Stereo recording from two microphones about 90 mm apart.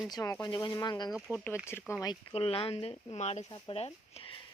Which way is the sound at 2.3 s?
90° left.